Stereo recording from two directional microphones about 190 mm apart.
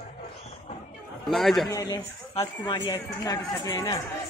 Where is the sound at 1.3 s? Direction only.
Centre (ahead or behind).